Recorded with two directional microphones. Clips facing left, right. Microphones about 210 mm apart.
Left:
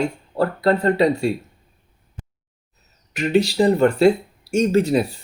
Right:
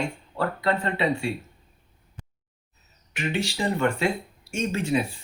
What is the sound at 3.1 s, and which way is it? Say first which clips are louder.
Speech: left 10 dB; 40° left (ahead or behind).